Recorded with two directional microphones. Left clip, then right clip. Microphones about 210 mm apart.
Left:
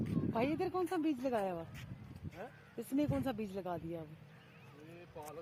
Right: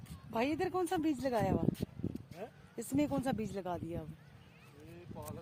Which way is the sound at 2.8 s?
15° right (ahead or behind).